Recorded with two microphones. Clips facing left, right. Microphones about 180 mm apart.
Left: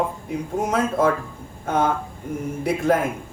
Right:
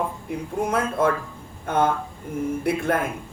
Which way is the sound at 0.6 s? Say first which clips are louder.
Left 2 dB; 55° right (ahead or behind).